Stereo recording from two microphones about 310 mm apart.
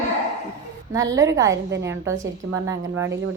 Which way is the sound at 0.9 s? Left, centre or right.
Centre.